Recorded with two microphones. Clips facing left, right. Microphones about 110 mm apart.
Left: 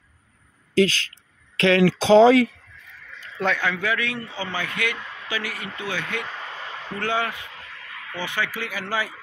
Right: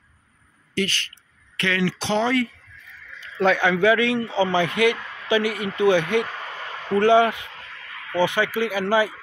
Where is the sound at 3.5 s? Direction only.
20° right (ahead or behind).